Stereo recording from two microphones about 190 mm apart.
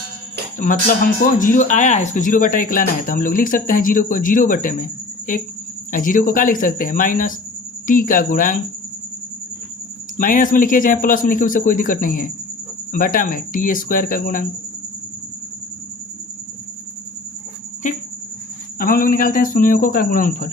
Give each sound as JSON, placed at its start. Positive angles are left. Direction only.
{"t": 0.6, "sound": "speech", "side_deg": 45}
{"t": 10.2, "sound": "speech", "side_deg": 45}
{"t": 17.8, "sound": "cricket", "side_deg": 40}
{"t": 18.8, "sound": "speech", "side_deg": 50}